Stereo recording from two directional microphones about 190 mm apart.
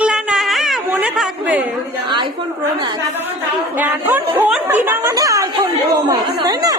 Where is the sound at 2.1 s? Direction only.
25° right (ahead or behind).